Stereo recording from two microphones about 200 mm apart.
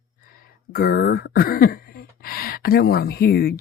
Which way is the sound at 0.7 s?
45° left (ahead or behind).